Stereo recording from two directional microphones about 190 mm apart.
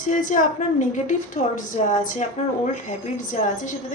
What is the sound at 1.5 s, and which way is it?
A woman's voice, 45° left (ahead or behind).